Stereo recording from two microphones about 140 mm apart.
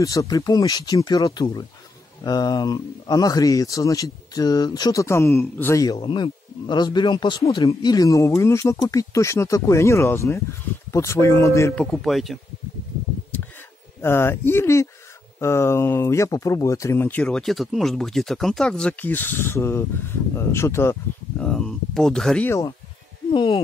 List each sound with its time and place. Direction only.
0.0 s speech: 25° left (ahead or behind)
5.9 s speech: 40° left (ahead or behind); by 11.7 s 20° left (ahead or behind)
11.7 s speech: 5° left (ahead or behind)
14.0 s speech: 15° left (ahead or behind)
21.4 s speech: 5° left (ahead or behind)
22.5 s speech: 25° left (ahead or behind)
23.3 s speech: 35° left (ahead or behind)